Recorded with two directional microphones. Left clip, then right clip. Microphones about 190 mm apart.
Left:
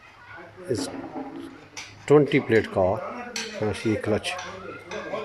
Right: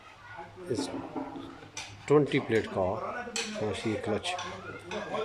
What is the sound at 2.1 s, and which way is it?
Speech, centre (ahead or behind).